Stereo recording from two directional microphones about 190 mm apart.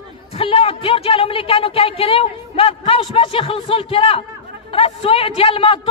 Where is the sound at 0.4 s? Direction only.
30° left (ahead or behind).